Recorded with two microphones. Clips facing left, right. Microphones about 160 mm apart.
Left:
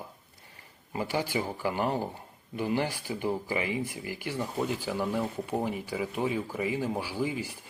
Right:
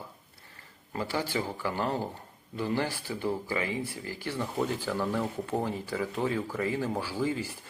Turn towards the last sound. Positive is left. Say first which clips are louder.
# right 1 dB
turn(degrees=15)  # may be behind; listen again after turning